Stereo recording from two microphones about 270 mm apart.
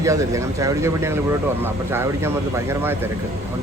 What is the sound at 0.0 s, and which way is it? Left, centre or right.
Speech, centre.